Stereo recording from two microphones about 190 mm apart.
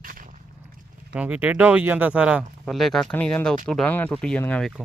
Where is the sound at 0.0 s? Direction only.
45° right (ahead or behind).